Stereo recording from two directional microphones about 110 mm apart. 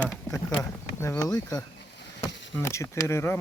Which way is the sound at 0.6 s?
30° left (ahead or behind).